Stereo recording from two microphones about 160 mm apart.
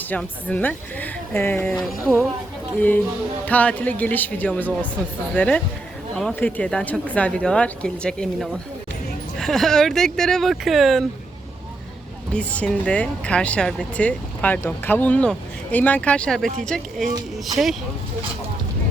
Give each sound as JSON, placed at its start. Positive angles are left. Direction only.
{"t": 0.1, "sound": "speech", "side_deg": 10}
{"t": 1.7, "sound": "speech", "side_deg": 0}
{"t": 3.4, "sound": "speech", "side_deg": 10}
{"t": 12.3, "sound": "speech", "side_deg": 10}